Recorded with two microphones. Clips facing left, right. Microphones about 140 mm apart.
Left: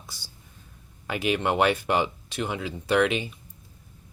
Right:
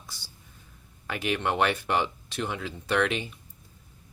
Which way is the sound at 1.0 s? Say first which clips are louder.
Left 3 dB; 15° left (ahead or behind).